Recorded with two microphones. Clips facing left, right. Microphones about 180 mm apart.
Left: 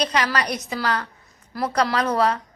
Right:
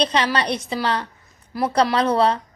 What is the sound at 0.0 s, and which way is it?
A woman's voice, 30° right (ahead or behind).